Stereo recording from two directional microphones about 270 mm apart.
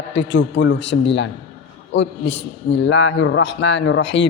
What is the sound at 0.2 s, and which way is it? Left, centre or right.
A man's voice, left.